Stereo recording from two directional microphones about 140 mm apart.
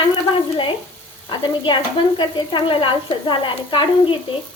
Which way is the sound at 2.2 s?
35° left (ahead or behind).